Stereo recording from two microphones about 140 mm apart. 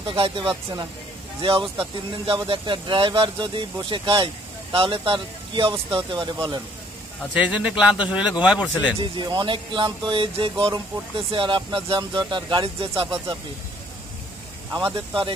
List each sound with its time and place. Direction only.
0.0 s speech: 35° right (ahead or behind)
7.3 s a man's voice: 10° right (ahead or behind)
9.0 s speech: 35° right (ahead or behind)
14.7 s speech: 15° right (ahead or behind)